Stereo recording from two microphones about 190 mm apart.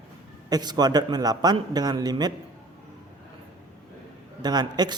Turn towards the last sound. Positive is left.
turn(degrees=-20)  # may be behind; listen again after turning